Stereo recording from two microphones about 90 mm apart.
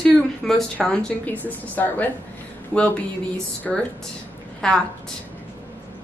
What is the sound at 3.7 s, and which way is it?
A woman's voice, 10° left (ahead or behind).